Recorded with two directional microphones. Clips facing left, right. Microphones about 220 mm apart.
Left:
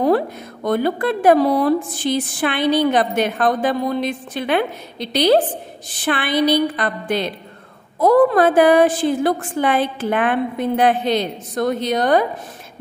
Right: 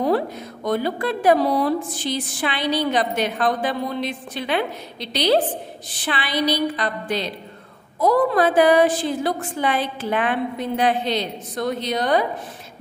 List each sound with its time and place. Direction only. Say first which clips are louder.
0.7 s a woman's voice: left 4 dB; 55° left (ahead or behind)